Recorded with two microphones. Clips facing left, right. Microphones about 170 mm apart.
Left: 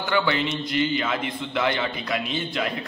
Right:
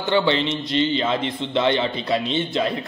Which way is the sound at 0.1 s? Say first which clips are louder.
Right 4 dB; 25° right (ahead or behind).